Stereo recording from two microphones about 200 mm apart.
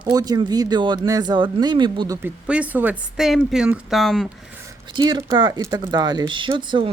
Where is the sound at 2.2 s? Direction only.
5° right (ahead or behind).